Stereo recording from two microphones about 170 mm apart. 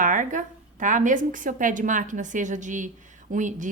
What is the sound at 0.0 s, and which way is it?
A woman's voice, 50° right (ahead or behind).